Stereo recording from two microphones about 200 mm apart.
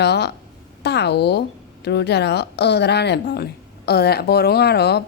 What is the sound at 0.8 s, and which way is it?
A woman's voice, 55° left (ahead or behind).